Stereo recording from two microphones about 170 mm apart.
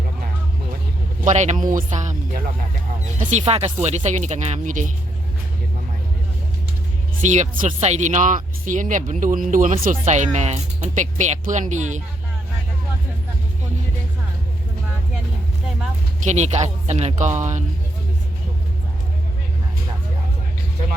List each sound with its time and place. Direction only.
1.2 s speech: 45° right (ahead or behind)
7.3 s speech: 45° right (ahead or behind)
16.2 s speech: 40° right (ahead or behind)